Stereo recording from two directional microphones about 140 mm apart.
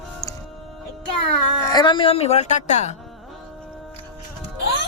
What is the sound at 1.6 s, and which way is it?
A woman's voice, 30° left (ahead or behind).